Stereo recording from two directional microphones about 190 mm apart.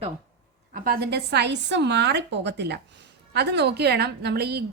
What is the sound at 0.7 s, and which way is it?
A woman's voice, 55° right (ahead or behind).